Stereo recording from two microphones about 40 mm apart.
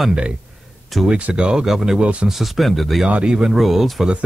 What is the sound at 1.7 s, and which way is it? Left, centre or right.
Speech, centre.